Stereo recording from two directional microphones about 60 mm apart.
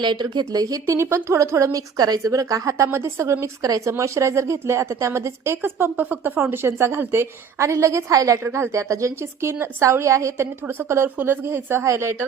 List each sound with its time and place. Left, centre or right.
0.5 s speech: right
0.9 s a woman's voice: right
2.2 s a woman's voice: right
3.6 s a woman's voice: right
5.6 s a woman's voice: right
8.4 s a woman's voice: right